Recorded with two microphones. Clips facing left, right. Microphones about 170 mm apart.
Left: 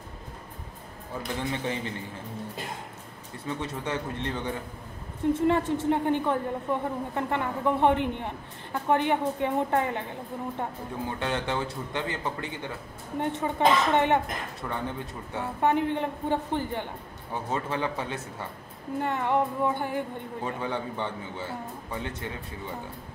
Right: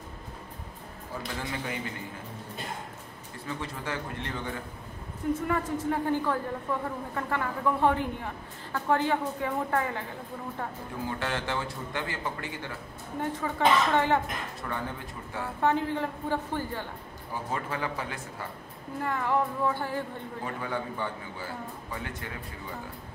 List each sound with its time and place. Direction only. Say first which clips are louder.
1.4 s speech: left 6 dB; 25° left (ahead or behind)
3.4 s speech: left 3 dB; 20° left (ahead or behind)